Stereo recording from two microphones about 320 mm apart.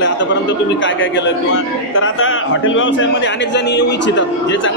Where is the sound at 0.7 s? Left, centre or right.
Left.